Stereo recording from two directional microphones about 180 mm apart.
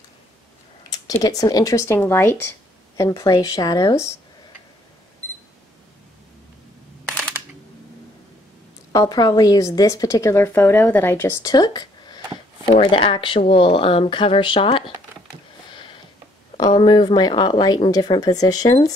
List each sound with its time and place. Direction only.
0.8 s a woman's voice: 20° left (ahead or behind)
7.1 s camera: centre (ahead or behind)
8.9 s a woman's voice: 20° left (ahead or behind)
15.7 s sniff: 25° left (ahead or behind)
16.5 s a woman's voice: 25° left (ahead or behind)